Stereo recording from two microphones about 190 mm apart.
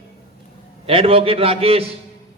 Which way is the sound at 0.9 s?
30° right (ahead or behind).